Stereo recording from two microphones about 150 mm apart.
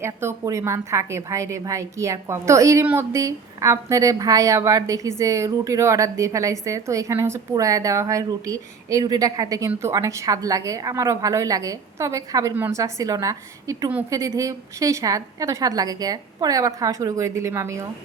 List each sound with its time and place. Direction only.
0.0 s a woman's voice: 15° right (ahead or behind)
12.5 s a woman's voice: 10° right (ahead or behind)
12.8 s a woman's voice: 25° right (ahead or behind)